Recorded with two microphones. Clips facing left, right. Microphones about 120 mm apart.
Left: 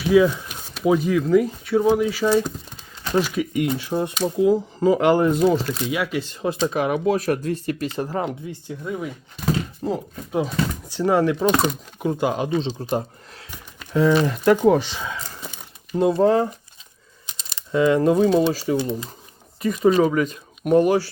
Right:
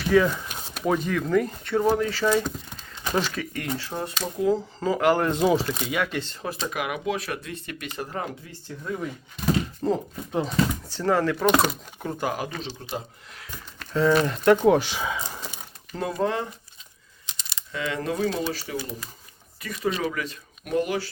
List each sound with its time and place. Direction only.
0.0 s speech: 5° left (ahead or behind); by 5.2 s 20° left (ahead or behind)
5.4 s speech: 5° right (ahead or behind)
6.7 s speech: 30° left (ahead or behind)
8.8 s speech: 10° left (ahead or behind)
11.4 s speech: centre (ahead or behind)
11.9 s speech: 20° left (ahead or behind)
12.8 s speech: 35° left (ahead or behind)
13.5 s a sound: 15° left (ahead or behind)
14.1 s speech: centre (ahead or behind)
16.0 s speech: 25° left (ahead or behind)
17.7 s speech: 35° left (ahead or behind)
20.7 s speech: 45° left (ahead or behind)